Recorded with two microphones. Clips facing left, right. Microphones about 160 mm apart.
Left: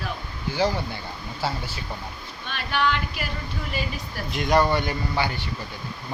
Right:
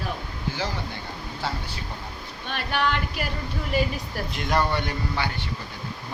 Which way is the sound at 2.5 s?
50° right (ahead or behind).